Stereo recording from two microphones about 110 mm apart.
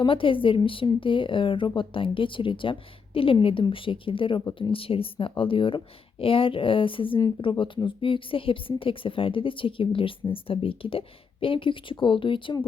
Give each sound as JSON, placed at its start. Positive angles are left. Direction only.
{"t": 0.0, "sound": "a woman's voice", "side_deg": 50}